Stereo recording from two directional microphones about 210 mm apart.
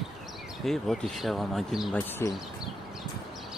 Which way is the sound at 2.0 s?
10° left (ahead or behind).